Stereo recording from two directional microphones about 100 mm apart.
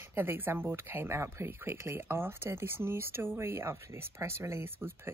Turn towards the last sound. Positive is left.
turn(degrees=-25)  # may be behind; listen again after turning